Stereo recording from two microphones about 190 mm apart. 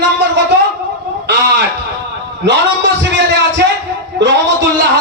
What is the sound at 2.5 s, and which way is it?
Speech, 70° right (ahead or behind).